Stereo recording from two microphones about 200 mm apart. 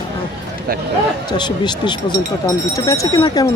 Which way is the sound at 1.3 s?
20° left (ahead or behind).